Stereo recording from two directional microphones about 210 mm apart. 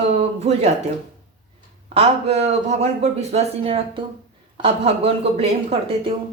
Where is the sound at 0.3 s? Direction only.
30° right (ahead or behind).